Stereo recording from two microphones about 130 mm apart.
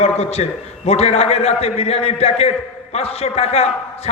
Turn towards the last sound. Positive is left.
turn(degrees=50)  # may be behind; listen again after turning